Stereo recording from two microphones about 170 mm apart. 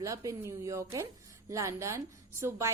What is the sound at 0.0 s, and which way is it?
A woman's voice, 20° right (ahead or behind).